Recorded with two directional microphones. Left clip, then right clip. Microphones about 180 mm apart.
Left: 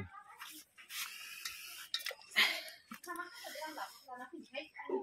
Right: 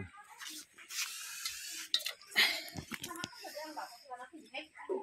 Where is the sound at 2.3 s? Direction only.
5° right (ahead or behind).